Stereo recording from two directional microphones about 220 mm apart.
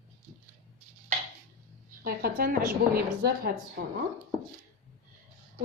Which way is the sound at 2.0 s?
40° right (ahead or behind).